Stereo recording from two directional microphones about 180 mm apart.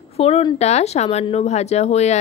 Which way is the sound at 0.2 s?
35° left (ahead or behind).